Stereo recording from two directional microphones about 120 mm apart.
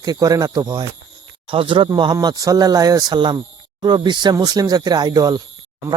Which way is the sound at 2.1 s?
30° right (ahead or behind).